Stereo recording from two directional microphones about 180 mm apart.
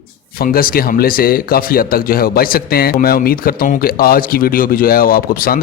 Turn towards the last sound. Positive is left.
turn(degrees=55)  # may be behind; listen again after turning